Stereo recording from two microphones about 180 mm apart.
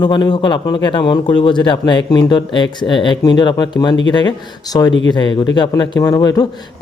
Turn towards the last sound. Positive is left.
turn(degrees=20)  # may be behind; listen again after turning